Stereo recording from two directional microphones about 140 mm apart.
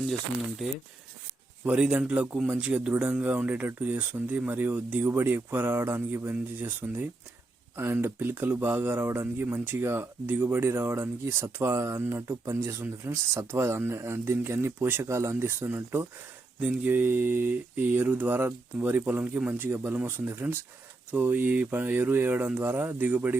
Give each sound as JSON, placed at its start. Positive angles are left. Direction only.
{"t": 1.6, "sound": "speech", "side_deg": -10}